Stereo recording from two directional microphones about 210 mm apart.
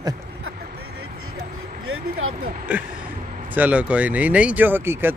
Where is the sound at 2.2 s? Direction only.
75° right (ahead or behind).